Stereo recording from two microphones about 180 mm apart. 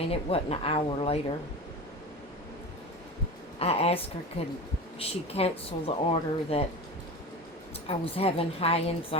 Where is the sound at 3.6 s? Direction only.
35° left (ahead or behind).